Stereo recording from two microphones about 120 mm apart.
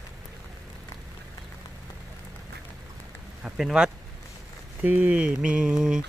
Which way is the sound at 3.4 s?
5° right (ahead or behind).